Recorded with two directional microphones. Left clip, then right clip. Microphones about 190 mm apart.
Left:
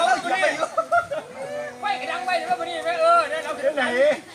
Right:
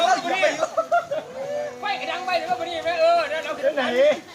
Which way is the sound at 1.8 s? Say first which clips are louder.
Left 4 dB; 10° right (ahead or behind).